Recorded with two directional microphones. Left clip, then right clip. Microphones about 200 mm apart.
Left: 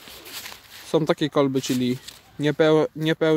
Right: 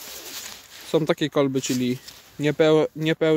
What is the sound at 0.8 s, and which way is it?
Speech, 5° right (ahead or behind).